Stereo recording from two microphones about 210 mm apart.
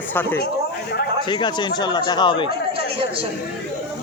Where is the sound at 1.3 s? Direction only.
20° left (ahead or behind).